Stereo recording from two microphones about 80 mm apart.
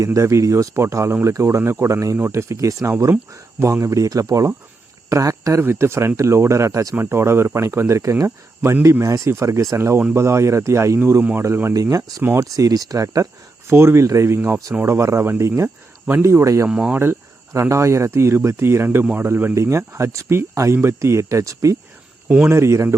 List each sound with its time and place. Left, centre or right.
0.0 s speech: right
6.9 s speech: right
11.2 s a man's voice: right
11.7 s speech: right
13.7 s speech: right
16.6 s speech: centre
16.9 s a man's voice: right
19.5 s speech: right